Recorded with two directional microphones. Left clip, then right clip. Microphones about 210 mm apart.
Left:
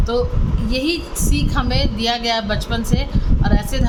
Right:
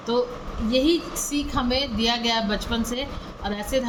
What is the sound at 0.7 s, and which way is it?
A woman's voice, 25° left (ahead or behind).